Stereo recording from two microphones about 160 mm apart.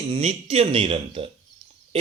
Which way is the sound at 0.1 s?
40° right (ahead or behind).